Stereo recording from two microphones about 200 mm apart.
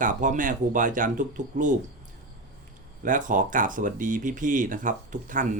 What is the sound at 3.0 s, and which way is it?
Speech, 40° right (ahead or behind).